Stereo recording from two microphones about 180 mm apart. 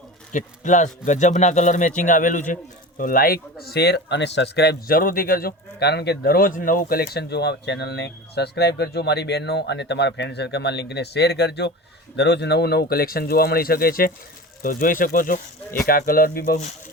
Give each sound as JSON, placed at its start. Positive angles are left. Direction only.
{"t": 0.3, "sound": "speech", "side_deg": 45}